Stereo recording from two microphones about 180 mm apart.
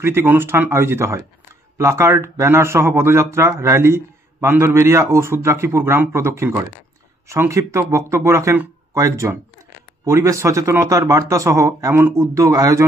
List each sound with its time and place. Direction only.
0.0 s speech: 10° right (ahead or behind)